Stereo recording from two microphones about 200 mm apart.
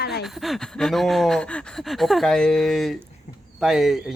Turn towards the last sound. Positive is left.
turn(degrees=0)  # may be behind; listen again after turning